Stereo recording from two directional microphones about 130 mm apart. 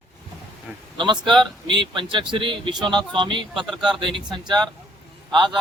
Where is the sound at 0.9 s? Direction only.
35° right (ahead or behind).